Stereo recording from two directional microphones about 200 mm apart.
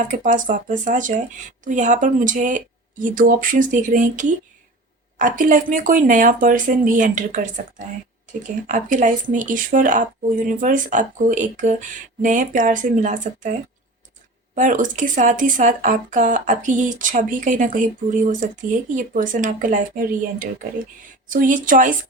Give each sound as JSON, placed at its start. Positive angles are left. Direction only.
{"t": 0.0, "sound": "speech", "side_deg": -40}